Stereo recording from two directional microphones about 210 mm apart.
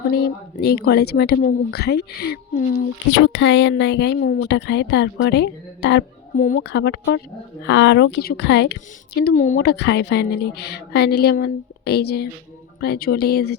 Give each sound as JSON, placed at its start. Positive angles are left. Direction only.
{"t": 0.2, "sound": "speech", "side_deg": 50}
{"t": 3.2, "sound": "speech", "side_deg": 60}
{"t": 6.3, "sound": "speech", "side_deg": 40}
{"t": 9.2, "sound": "speech", "side_deg": 35}
{"t": 9.6, "sound": "speech", "side_deg": 55}